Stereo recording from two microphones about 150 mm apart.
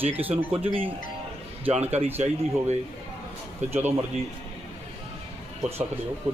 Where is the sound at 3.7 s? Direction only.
15° right (ahead or behind).